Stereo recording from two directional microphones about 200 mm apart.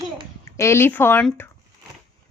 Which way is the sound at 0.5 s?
15° left (ahead or behind).